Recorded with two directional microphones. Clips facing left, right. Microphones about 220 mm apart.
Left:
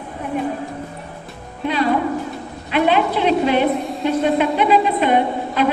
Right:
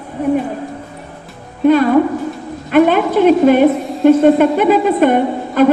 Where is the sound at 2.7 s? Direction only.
50° right (ahead or behind).